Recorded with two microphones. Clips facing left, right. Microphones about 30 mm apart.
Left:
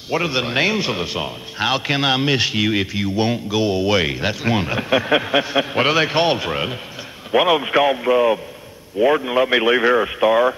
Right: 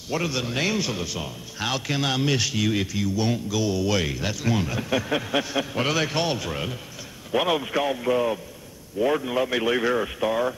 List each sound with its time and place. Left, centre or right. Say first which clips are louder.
0.1 s a man's voice: left 7 dB; left
7.6 s a man's voice: left 8 dB; left